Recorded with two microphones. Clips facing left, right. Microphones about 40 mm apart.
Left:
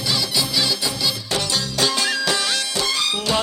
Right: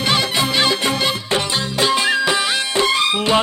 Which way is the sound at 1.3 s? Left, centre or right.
Right.